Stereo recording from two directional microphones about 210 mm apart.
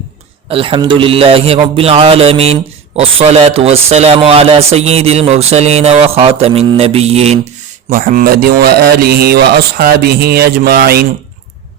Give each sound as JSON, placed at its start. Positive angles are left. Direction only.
{"t": 0.4, "sound": "speech", "side_deg": -25}
{"t": 7.9, "sound": "speech", "side_deg": -40}